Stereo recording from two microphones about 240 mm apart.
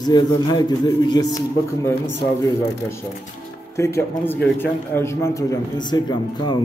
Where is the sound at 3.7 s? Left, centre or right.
Centre.